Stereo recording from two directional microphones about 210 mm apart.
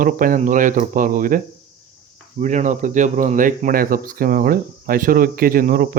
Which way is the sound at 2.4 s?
35° right (ahead or behind).